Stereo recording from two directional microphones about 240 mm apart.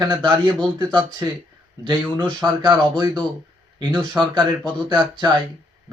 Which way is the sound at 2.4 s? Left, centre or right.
Centre.